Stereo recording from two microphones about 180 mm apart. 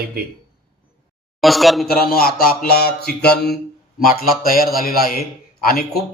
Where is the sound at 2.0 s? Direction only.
55° left (ahead or behind).